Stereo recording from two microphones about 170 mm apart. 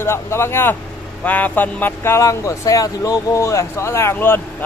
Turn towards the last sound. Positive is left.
turn(degrees=15)  # may be behind; listen again after turning